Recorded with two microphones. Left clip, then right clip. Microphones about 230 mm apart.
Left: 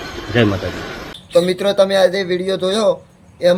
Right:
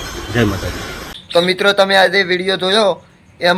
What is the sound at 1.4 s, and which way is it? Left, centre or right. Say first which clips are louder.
A man's voice: right 2 dB; centre.